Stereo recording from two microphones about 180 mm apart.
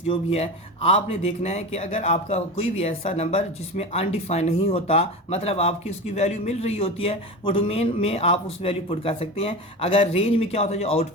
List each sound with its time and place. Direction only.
0.1 s speech: 35° left (ahead or behind)